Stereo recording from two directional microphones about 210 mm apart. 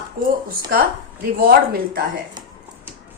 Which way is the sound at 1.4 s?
45° right (ahead or behind).